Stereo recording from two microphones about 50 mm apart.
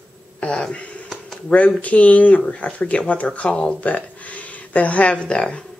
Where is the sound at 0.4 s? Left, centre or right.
Left.